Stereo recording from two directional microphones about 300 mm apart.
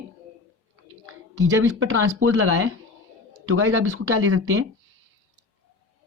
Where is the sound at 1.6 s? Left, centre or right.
Right.